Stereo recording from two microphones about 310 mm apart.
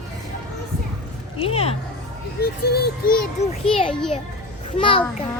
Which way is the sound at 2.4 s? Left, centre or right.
Left.